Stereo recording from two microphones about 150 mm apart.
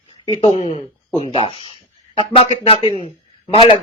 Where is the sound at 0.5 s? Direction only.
50° left (ahead or behind).